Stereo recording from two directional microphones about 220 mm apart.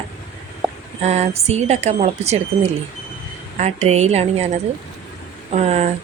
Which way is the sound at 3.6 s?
30° right (ahead or behind).